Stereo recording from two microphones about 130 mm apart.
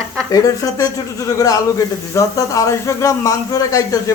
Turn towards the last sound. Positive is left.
turn(degrees=25)  # may be behind; listen again after turning